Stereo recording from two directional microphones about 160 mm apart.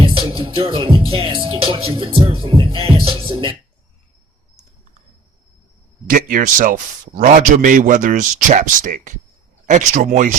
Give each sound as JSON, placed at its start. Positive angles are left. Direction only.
{"t": 0.0, "sound": "music", "side_deg": -30}
{"t": 6.1, "sound": "a man's voice", "side_deg": -60}